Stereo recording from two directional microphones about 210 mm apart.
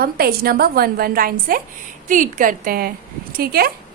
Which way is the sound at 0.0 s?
45° right (ahead or behind).